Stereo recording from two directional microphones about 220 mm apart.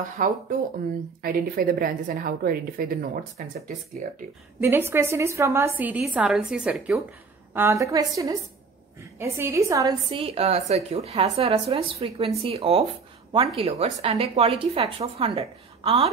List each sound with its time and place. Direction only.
0.2 s a woman's voice: 35° right (ahead or behind)
4.6 s a woman's voice: 10° right (ahead or behind); by 16.1 s 25° right (ahead or behind)